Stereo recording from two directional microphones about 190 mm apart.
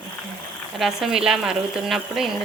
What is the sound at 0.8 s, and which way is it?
Speech, centre (ahead or behind).